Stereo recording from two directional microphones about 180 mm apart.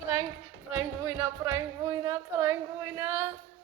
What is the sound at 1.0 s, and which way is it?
Speech, 15° right (ahead or behind).